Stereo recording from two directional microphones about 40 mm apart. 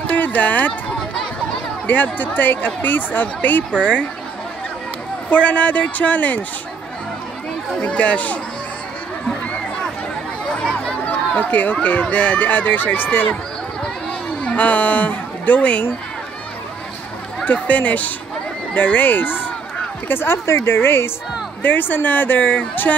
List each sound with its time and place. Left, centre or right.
0.1 s a sound: left
1.9 s speech: left
5.3 s speech: left
7.8 s speech: left
10.5 s chatter: centre
11.1 s speech: left
14.4 s a woman's voice: left
17.5 s speech: left
20.1 s speech: left
20.6 s speech: left
21.6 s speech: left